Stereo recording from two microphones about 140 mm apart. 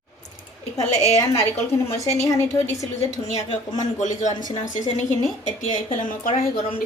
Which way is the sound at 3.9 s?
60° left (ahead or behind).